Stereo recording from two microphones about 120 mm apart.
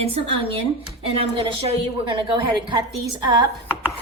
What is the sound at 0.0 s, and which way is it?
A woman's voice, 55° right (ahead or behind).